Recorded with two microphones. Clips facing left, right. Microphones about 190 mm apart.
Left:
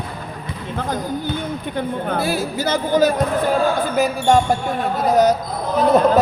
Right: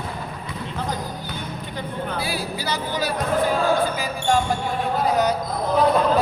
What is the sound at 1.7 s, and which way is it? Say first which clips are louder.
Speech: left 6 dB; 50° left (ahead or behind).